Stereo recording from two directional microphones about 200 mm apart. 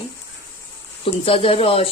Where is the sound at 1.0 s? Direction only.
30° left (ahead or behind).